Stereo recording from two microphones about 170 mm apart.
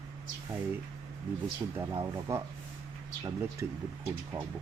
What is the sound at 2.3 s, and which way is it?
Speech, 15° right (ahead or behind).